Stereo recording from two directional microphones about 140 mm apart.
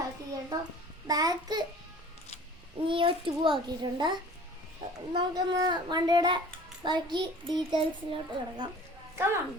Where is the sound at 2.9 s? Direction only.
40° right (ahead or behind).